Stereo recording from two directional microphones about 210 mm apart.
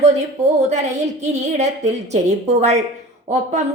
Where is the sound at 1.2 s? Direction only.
35° right (ahead or behind).